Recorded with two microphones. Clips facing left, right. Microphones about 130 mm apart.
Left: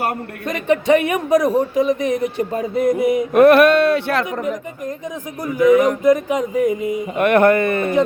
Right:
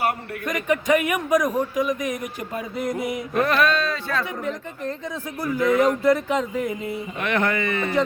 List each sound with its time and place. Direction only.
0.4 s speech: 30° left (ahead or behind)
3.3 s speech: 65° left (ahead or behind)
5.4 s speech: 20° left (ahead or behind)
7.2 s speech: 55° left (ahead or behind)